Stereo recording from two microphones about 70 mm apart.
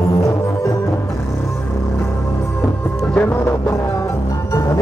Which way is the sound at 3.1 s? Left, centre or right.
Left.